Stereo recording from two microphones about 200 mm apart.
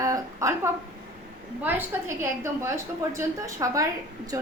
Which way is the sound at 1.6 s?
10° right (ahead or behind).